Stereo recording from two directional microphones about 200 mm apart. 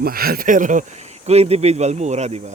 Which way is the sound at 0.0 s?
50° right (ahead or behind).